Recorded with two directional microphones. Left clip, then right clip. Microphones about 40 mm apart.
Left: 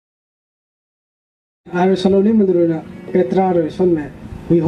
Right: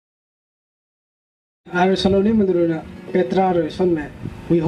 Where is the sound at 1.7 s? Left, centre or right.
Right.